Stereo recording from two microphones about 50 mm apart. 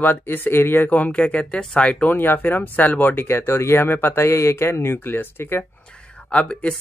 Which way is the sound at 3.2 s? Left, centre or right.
Left.